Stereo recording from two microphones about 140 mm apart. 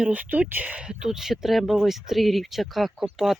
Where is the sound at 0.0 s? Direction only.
10° right (ahead or behind).